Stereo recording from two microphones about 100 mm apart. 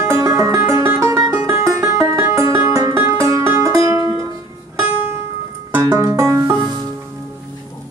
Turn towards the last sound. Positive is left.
turn(degrees=-30)  # may be behind; listen again after turning